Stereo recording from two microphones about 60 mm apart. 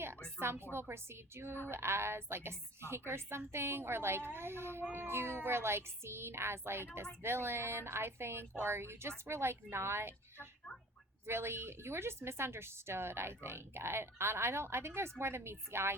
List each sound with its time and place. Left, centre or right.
0.3 s a sound: right
0.7 s a woman's voice: right
11.3 s a woman's voice: right